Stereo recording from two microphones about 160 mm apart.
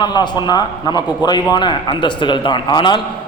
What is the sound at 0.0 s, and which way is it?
A man's voice, 25° left (ahead or behind).